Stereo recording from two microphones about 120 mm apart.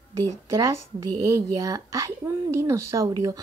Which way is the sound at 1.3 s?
30° right (ahead or behind).